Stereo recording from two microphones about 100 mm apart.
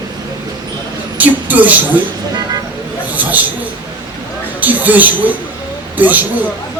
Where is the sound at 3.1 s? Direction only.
15° right (ahead or behind).